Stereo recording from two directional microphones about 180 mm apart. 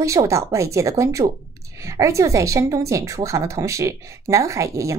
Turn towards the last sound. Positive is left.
turn(degrees=-15)  # may be behind; listen again after turning